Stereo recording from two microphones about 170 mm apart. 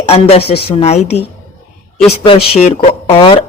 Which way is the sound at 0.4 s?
70° left (ahead or behind).